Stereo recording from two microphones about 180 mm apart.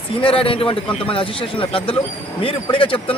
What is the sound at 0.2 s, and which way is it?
A man's voice, 30° left (ahead or behind).